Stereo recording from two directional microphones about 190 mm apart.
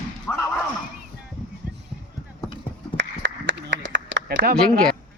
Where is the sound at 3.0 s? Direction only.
75° right (ahead or behind); by 4.6 s 55° right (ahead or behind).